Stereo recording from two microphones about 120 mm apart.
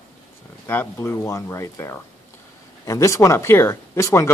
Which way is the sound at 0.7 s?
15° left (ahead or behind).